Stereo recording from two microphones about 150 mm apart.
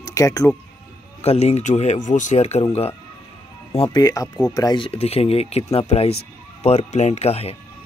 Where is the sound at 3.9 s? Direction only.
25° left (ahead or behind); by 7.5 s 45° left (ahead or behind).